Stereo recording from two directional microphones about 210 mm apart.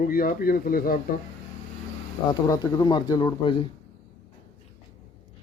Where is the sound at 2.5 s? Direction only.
20° left (ahead or behind).